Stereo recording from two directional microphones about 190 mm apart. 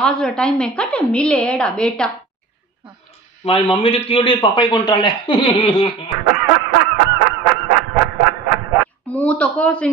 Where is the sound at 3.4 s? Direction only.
30° left (ahead or behind).